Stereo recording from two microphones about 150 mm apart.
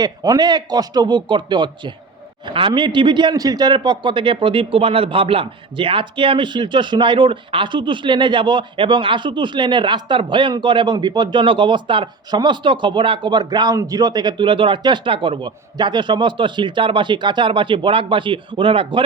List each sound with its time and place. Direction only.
0.0 s a man's voice: 25° right (ahead or behind)